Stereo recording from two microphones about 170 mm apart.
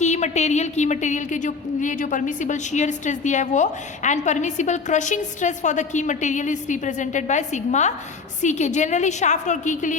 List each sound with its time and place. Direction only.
0.0 s a woman's voice: 45° left (ahead or behind)